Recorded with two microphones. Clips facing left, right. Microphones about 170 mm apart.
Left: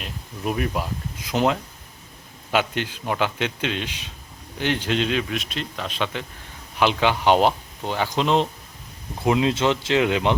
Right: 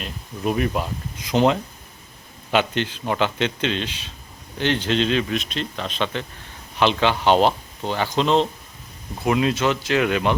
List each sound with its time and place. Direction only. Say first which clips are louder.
0.0 s speech: right 3 dB; 5° left (ahead or behind)